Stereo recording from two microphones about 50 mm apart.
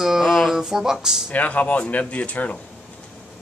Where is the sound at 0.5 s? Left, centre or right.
Centre.